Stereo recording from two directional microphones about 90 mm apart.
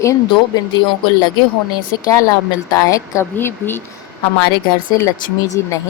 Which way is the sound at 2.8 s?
35° left (ahead or behind).